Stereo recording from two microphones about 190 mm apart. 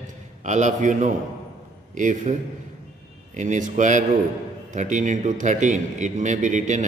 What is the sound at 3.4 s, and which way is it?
A man's voice, 40° right (ahead or behind).